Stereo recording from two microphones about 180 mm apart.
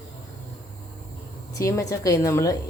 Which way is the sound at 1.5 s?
15° left (ahead or behind).